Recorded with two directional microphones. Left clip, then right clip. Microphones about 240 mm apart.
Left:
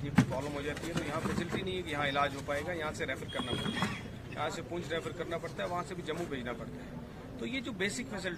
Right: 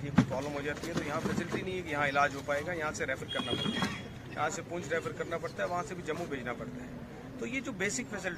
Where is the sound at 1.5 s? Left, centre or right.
Right.